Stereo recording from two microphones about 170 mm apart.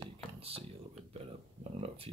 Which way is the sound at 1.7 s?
35° right (ahead or behind).